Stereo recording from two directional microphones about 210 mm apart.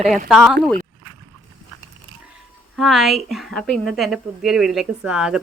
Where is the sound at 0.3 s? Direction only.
5° right (ahead or behind).